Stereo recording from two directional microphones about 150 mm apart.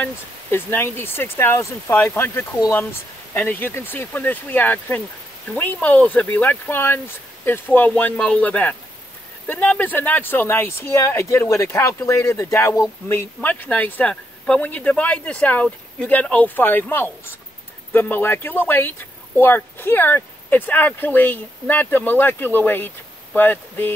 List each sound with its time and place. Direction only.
0.0 s speech: 15° left (ahead or behind)